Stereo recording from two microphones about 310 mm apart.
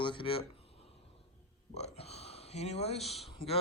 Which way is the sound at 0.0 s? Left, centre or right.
Centre.